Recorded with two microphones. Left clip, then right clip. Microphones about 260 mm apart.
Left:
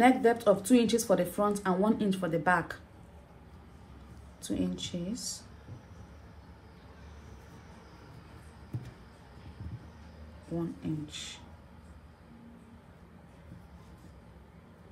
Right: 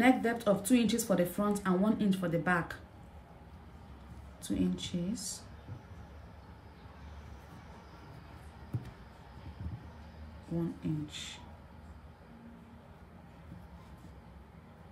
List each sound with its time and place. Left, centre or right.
0.0 s speech: centre
4.4 s speech: centre
10.8 s speech: centre